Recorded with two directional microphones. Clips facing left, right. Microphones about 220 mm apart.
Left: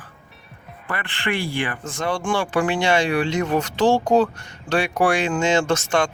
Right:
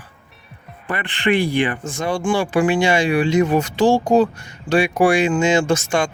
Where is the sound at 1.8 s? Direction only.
10° right (ahead or behind).